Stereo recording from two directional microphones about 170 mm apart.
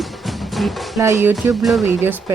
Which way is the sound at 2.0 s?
15° right (ahead or behind).